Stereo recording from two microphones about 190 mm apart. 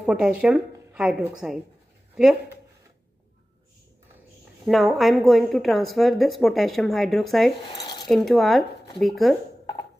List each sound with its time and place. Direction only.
0.0 s a woman's voice: 5° right (ahead or behind)
4.6 s a woman's voice: centre (ahead or behind)
7.6 s cutlery: 20° left (ahead or behind)
8.0 s a woman's voice: centre (ahead or behind)